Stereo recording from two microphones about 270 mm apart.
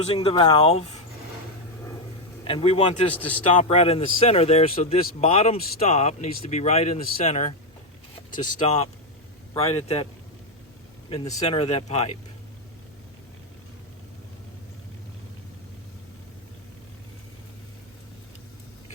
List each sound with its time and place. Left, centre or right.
0.0 s speech: left
2.4 s speech: centre
11.1 s speech: centre